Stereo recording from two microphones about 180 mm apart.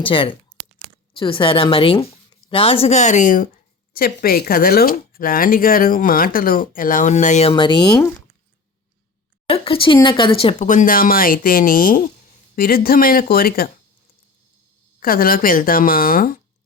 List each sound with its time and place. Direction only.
0.0 s a woman's voice: 30° left (ahead or behind)
7.5 s speech: 25° left (ahead or behind)
9.5 s speech: 30° left (ahead or behind)
10.7 s speech: 50° left (ahead or behind)
15.0 s speech: 55° left (ahead or behind)